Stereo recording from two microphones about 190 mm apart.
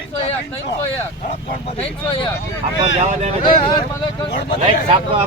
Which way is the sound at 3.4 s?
25° left (ahead or behind).